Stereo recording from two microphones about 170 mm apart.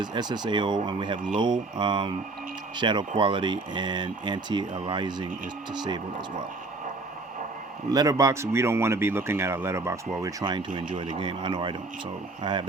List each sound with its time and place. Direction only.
0.0 s speech: 25° right (ahead or behind)
7.9 s speech: 20° right (ahead or behind)